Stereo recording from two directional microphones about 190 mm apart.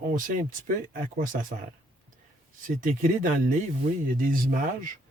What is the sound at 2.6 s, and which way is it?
Speech, 45° right (ahead or behind).